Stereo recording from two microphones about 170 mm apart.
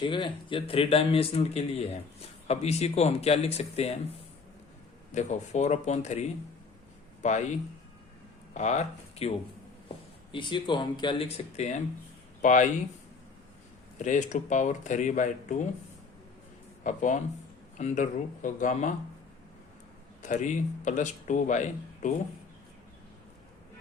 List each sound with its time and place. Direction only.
0.0 s speech: 30° left (ahead or behind)
5.1 s speech: 45° left (ahead or behind)
8.5 s speech: 45° left (ahead or behind)
10.3 s speech: 30° left (ahead or behind); by 12.6 s 45° left (ahead or behind)
14.0 s speech: 45° left (ahead or behind)
16.8 s speech: 45° left (ahead or behind)
20.2 s speech: 45° left (ahead or behind)